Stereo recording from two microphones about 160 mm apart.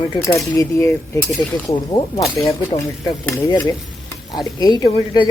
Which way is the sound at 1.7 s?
30° left (ahead or behind).